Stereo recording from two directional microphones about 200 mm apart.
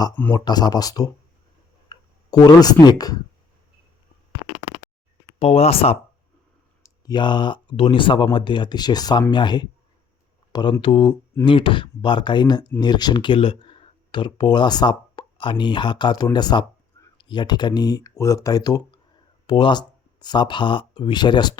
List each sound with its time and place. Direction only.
0.2 s speech: 10° left (ahead or behind)
5.4 s speech: 30° left (ahead or behind)